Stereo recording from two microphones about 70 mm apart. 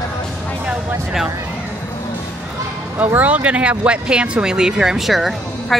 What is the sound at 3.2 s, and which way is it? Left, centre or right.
Speech, right.